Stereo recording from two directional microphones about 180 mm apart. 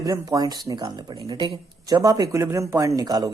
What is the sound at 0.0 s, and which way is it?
Speech, 20° right (ahead or behind).